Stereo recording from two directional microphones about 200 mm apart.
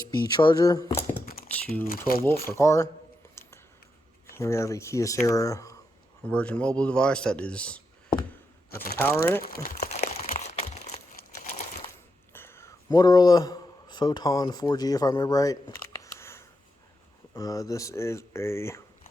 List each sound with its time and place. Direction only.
0.3 s speech: 20° left (ahead or behind)
1.2 s typing: 45° left (ahead or behind)
1.5 s typing: 5° left (ahead or behind)
1.9 s speech: 45° left (ahead or behind)
2.2 s speech: 15° left (ahead or behind)
3.2 s a sound: 10° left (ahead or behind)
4.3 s speech: 15° left (ahead or behind)
9.0 s speech: 15° left (ahead or behind)
9.4 s speech: 45° left (ahead or behind)
9.9 s a sound: 35° left (ahead or behind)
11.2 s a sound: 45° left (ahead or behind)
12.3 s a man's voice: 10° left (ahead or behind)
16.0 s a sound: 15° left (ahead or behind)
17.3 s speech: 15° left (ahead or behind)